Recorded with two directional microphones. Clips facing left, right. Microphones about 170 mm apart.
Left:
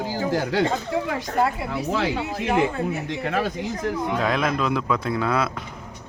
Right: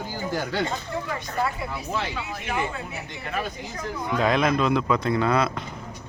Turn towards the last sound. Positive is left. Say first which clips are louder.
# right 1 dB
turn(degrees=5)  # may be behind; listen again after turning